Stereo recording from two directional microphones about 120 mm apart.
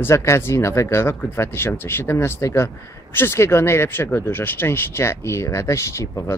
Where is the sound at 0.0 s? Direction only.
25° left (ahead or behind).